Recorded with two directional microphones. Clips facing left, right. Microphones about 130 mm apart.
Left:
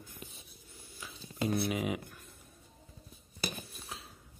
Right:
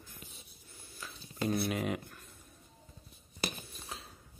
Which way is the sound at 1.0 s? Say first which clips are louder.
Left 1 dB; 15° left (ahead or behind).